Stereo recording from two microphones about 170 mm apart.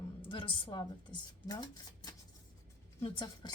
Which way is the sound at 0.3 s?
30° left (ahead or behind).